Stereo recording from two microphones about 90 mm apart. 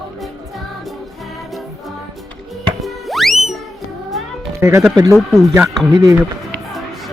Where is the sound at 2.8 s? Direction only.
Centre (ahead or behind).